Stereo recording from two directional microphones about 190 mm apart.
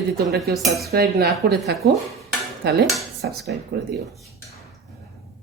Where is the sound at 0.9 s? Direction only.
55° right (ahead or behind).